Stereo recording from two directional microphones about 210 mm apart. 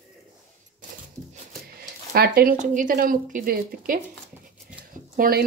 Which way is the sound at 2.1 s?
45° right (ahead or behind).